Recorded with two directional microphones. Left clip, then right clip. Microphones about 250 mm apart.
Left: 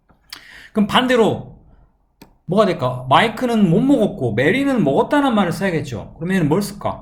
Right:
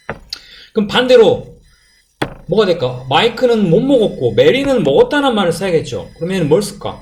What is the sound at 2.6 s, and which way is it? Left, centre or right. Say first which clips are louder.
Speech: right 2 dB; left.